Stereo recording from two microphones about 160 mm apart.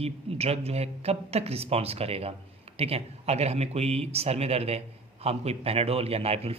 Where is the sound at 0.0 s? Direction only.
40° right (ahead or behind).